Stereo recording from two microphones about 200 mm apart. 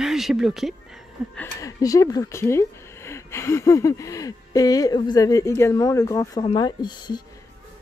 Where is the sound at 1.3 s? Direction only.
10° left (ahead or behind).